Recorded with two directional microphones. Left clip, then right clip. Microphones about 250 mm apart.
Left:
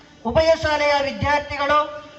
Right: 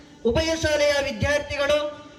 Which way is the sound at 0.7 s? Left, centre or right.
Right.